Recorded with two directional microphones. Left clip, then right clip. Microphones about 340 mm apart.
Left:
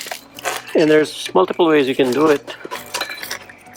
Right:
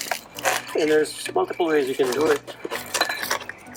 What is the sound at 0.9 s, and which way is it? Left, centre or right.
Speech, centre.